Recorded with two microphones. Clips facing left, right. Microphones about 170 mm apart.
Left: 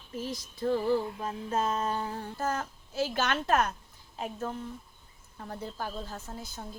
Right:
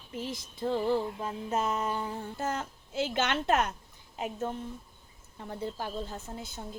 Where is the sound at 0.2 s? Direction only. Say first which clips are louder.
Left 1 dB; 20° right (ahead or behind).